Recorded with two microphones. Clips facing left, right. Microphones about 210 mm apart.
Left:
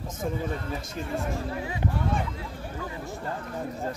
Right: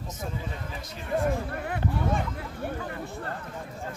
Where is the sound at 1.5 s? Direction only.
60° right (ahead or behind).